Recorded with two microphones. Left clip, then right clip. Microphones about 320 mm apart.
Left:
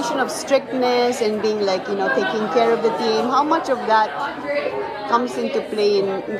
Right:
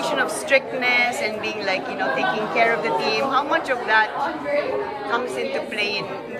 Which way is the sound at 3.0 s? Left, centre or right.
Centre.